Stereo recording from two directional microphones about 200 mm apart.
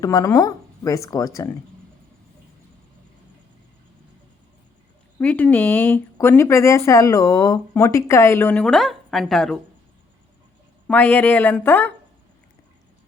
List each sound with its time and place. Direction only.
0.0 s speech: 15° left (ahead or behind)
5.2 s speech: 10° left (ahead or behind)
10.8 s speech: 10° left (ahead or behind)